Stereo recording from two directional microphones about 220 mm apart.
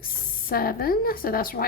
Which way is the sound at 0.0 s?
40° left (ahead or behind).